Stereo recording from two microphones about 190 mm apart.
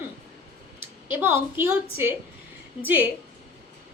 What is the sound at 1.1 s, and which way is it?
Speech, 10° right (ahead or behind).